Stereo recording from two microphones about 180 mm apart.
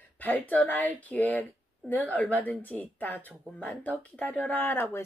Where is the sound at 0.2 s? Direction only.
10° left (ahead or behind).